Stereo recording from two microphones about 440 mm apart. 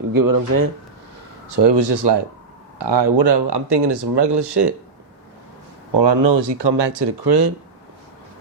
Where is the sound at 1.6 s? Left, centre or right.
Right.